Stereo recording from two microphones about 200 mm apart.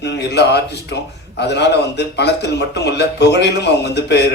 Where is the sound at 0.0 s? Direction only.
60° left (ahead or behind).